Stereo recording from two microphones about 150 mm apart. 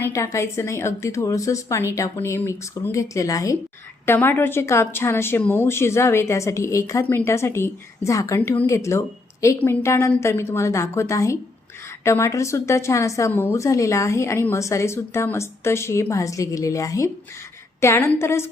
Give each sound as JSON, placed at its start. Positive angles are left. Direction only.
{"t": 0.0, "sound": "a woman's voice", "side_deg": 20}